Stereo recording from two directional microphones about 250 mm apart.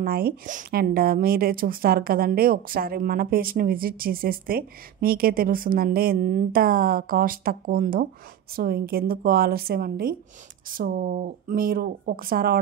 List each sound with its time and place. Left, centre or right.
0.0 s speech: right